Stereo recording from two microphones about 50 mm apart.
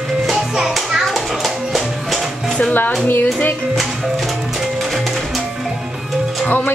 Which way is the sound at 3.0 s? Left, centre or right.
Left.